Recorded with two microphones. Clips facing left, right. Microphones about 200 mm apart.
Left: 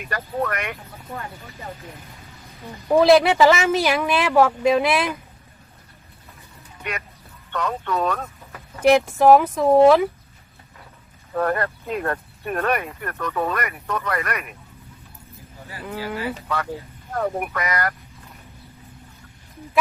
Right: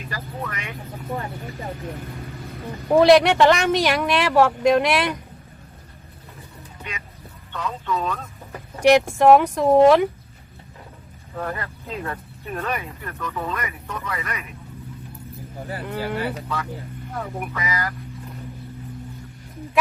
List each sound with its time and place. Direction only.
0.1 s speech: 65° left (ahead or behind)
2.9 s speech: centre (ahead or behind)
7.5 s speech: 65° left (ahead or behind)
8.8 s speech: centre (ahead or behind)
11.3 s speech: 60° left (ahead or behind)
15.8 s speech: centre (ahead or behind)
17.2 s speech: 60° left (ahead or behind)